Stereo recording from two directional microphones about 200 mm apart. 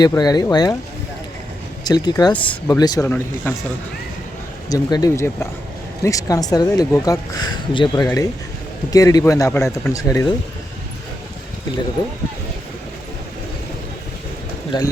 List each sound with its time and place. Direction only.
0.1 s speech: 20° left (ahead or behind)
1.8 s speech: 20° left (ahead or behind)
2.3 s speech: 5° left (ahead or behind)
2.6 s speech: 20° left (ahead or behind)
4.7 s speech: 20° left (ahead or behind)
14.7 s speech: 20° left (ahead or behind)